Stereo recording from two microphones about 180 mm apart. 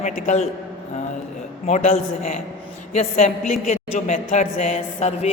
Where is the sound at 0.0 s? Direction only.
45° left (ahead or behind).